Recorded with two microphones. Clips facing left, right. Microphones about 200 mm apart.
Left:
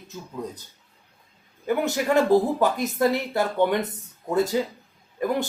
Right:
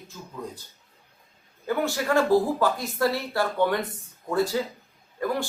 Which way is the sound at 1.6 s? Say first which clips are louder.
Left 2 dB; 20° left (ahead or behind).